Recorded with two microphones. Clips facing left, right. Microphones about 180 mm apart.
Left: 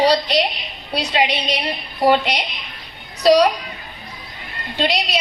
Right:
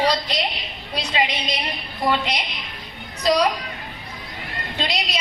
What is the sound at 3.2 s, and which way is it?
Speech, 70° left (ahead or behind).